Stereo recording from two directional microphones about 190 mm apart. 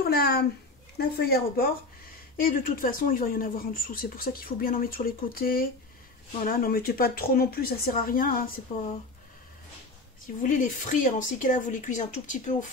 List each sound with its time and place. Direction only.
0.1 s speech: 55° left (ahead or behind)
10.2 s speech: 45° left (ahead or behind)